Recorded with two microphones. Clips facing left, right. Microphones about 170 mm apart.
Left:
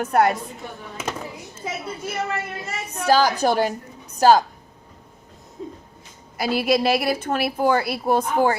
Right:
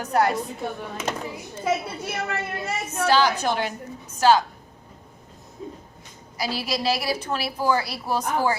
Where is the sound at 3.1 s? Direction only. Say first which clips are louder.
Left 3 dB; 40° left (ahead or behind).